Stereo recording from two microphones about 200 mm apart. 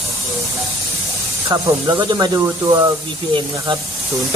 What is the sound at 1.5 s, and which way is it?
Speech, 15° right (ahead or behind).